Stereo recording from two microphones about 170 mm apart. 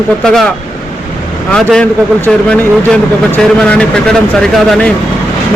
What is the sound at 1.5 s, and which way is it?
A man's voice, 5° left (ahead or behind).